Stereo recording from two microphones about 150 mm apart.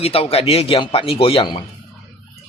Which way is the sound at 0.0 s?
40° left (ahead or behind).